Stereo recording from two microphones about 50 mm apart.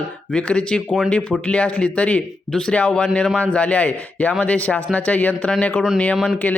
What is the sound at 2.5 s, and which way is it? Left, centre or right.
Speech, centre.